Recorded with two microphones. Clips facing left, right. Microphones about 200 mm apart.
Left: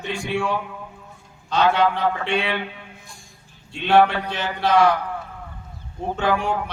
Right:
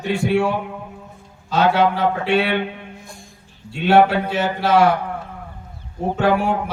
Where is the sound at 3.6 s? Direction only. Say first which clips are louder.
Right 3 dB; 5° right (ahead or behind).